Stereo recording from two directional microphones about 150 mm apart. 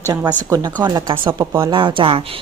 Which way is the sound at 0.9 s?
25° right (ahead or behind).